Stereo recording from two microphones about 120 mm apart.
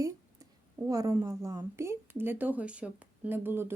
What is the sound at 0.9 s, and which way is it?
Speech, 30° right (ahead or behind).